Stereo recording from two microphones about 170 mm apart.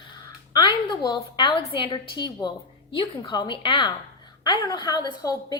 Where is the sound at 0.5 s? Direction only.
25° left (ahead or behind).